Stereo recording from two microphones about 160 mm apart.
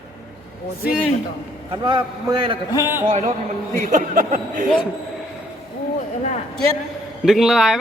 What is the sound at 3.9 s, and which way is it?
Speech, 55° right (ahead or behind).